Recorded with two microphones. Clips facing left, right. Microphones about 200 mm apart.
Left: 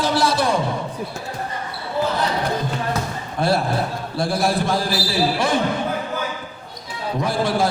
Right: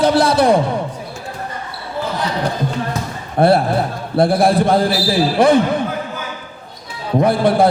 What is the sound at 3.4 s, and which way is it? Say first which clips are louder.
A man's voice: right 7 dB; 55° right (ahead or behind).